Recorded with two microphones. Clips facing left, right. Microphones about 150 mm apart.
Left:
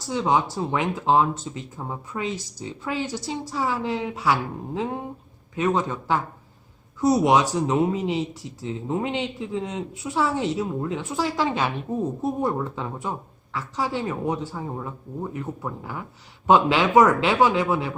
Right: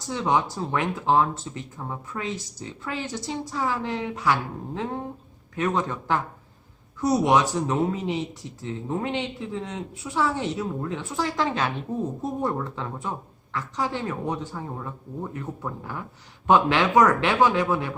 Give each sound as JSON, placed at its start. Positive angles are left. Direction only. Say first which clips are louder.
{"t": 0.1, "sound": "a woman's voice", "louder": "left 2 dB", "side_deg": 15}